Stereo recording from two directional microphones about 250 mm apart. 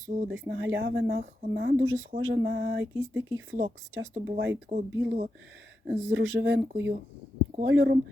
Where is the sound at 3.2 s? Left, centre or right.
Right.